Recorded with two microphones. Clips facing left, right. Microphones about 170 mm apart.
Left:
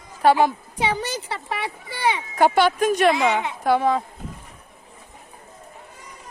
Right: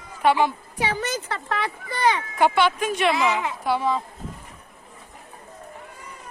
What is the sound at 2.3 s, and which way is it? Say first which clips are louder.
Speech: left 6 dB; 40° left (ahead or behind).